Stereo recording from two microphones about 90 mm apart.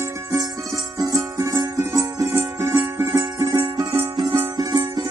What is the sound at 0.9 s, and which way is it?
Music, 45° right (ahead or behind).